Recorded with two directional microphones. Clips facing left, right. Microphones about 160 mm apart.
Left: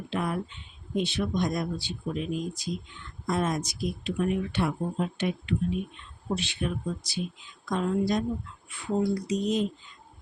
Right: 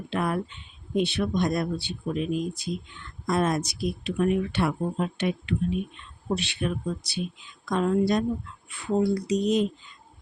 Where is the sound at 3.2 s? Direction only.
75° right (ahead or behind).